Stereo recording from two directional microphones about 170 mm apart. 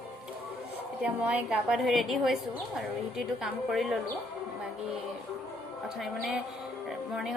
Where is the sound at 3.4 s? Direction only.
5° right (ahead or behind).